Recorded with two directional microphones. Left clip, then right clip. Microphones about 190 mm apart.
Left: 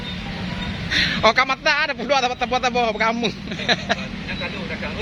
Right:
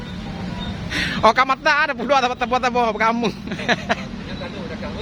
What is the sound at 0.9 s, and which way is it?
Speech, 10° right (ahead or behind).